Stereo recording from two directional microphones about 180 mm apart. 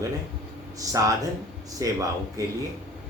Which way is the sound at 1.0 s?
20° right (ahead or behind).